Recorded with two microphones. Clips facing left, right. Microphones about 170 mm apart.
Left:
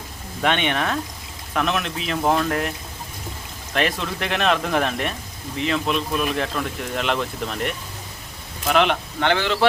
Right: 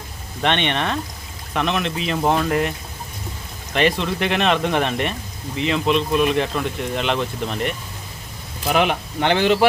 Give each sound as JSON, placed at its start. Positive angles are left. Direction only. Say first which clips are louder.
{"t": 0.4, "sound": "speech", "louder": "right 1 dB", "side_deg": 5}
{"t": 3.8, "sound": "speech", "louder": "right 4 dB", "side_deg": 0}